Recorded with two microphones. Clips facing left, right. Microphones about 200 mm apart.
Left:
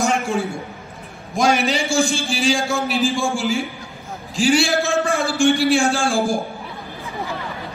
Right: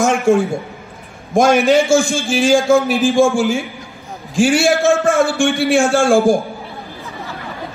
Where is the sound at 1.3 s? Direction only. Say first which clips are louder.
Right 7 dB; 45° right (ahead or behind).